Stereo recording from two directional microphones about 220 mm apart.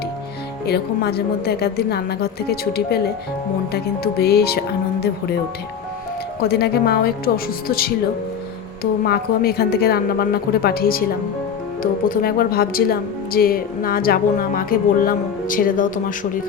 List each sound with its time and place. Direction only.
0.6 s a woman's voice: 45° left (ahead or behind)
6.4 s a woman's voice: 45° left (ahead or behind)